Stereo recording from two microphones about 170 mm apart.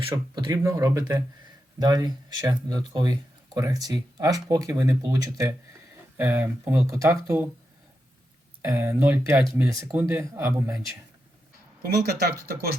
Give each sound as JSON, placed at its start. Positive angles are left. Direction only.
{"t": 0.0, "sound": "speech", "side_deg": -30}
{"t": 8.6, "sound": "speech", "side_deg": -15}
{"t": 11.8, "sound": "speech", "side_deg": -70}